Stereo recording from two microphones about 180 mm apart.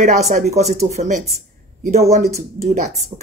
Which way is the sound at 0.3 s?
40° right (ahead or behind).